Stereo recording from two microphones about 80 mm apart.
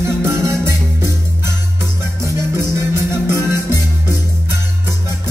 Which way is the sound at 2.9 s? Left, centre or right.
Right.